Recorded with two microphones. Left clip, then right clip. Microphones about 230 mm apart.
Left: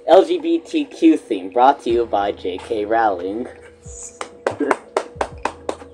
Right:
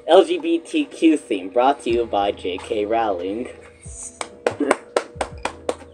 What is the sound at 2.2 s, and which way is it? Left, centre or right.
Speech, centre.